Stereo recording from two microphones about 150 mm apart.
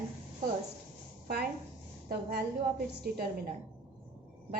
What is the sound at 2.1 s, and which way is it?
Speech, 90° right.